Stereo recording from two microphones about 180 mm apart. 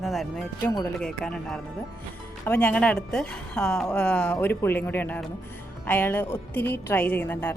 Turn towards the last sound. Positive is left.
turn(degrees=10)  # may be behind; listen again after turning